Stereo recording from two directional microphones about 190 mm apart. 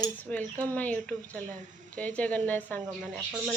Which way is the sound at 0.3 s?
5° left (ahead or behind).